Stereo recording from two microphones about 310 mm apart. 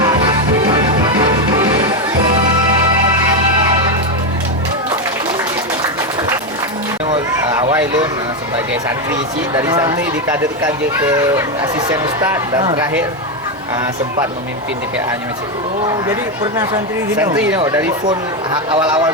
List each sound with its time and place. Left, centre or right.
0.7 s music: centre
7.1 s a sound: centre
9.5 s speech: centre
16.0 s speech: centre